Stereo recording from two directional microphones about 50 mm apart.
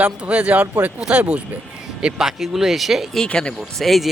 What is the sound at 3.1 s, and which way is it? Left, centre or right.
Speech, centre.